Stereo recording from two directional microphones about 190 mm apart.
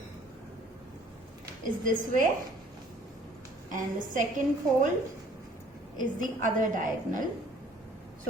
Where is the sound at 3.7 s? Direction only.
45° right (ahead or behind).